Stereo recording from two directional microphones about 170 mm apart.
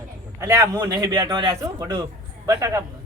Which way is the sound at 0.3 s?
15° right (ahead or behind).